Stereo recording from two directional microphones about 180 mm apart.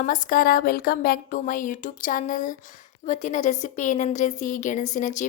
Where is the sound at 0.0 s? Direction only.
45° left (ahead or behind).